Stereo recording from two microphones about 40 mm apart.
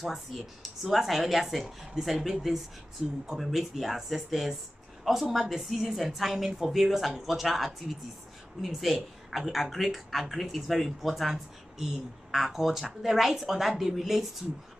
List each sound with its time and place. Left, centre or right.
0.0 s a woman's voice: centre